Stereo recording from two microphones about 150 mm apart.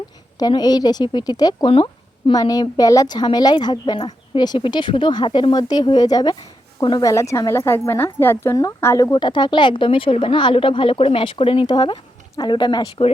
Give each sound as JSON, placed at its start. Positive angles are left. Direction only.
{"t": 0.3, "sound": "a woman's voice", "side_deg": 25}
{"t": 7.1, "sound": "speech", "side_deg": 20}
{"t": 9.1, "sound": "a woman's voice", "side_deg": 30}